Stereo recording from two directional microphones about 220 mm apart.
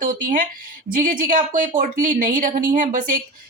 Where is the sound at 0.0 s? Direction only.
40° right (ahead or behind).